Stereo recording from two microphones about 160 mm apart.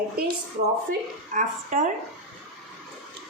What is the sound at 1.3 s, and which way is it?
Speech, 50° right (ahead or behind).